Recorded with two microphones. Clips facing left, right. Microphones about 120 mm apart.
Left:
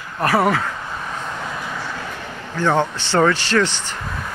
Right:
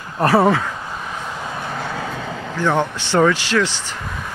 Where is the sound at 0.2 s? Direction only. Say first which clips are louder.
Right 3 dB; 25° right (ahead or behind).